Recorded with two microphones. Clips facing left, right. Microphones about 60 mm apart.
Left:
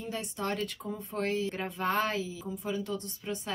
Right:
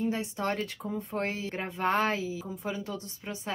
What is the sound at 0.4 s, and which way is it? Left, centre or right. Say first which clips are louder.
A woman's voice: right 2 dB; right.